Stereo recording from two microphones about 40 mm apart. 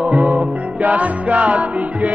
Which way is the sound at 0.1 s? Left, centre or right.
Right.